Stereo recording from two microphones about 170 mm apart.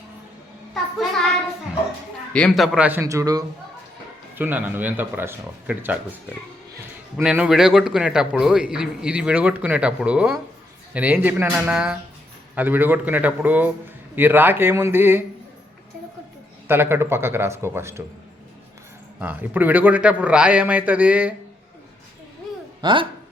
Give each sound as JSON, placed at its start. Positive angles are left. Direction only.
{"t": 2.3, "sound": "a man's voice", "side_deg": 5}
{"t": 2.7, "sound": "a man's voice", "side_deg": -10}
{"t": 7.2, "sound": "a man's voice", "side_deg": -5}
{"t": 16.6, "sound": "a man's voice", "side_deg": -15}
{"t": 19.2, "sound": "a man's voice", "side_deg": -10}
{"t": 22.8, "sound": "speech", "side_deg": -30}